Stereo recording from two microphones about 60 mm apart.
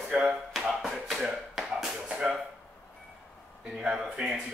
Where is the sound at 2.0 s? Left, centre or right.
Centre.